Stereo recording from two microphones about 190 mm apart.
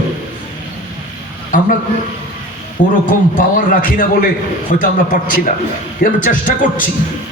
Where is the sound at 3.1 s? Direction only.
45° left (ahead or behind).